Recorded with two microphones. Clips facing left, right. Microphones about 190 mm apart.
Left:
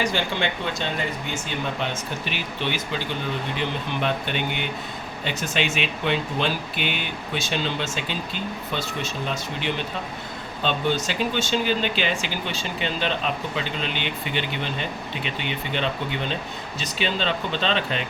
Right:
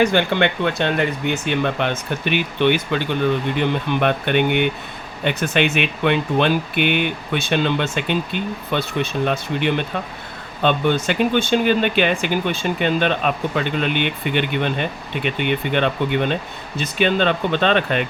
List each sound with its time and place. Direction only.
0.0 s speech: 60° right (ahead or behind)